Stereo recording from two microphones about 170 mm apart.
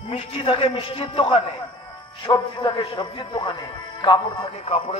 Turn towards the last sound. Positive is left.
turn(degrees=35)  # may be behind; listen again after turning